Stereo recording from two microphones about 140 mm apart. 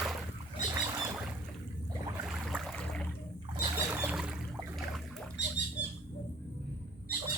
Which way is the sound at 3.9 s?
10° right (ahead or behind).